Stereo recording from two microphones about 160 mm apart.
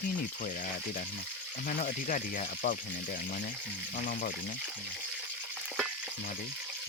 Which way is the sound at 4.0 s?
60° left (ahead or behind).